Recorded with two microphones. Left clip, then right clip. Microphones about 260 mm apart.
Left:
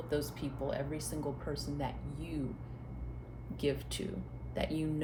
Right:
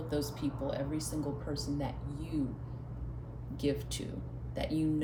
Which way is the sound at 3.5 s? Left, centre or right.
Left.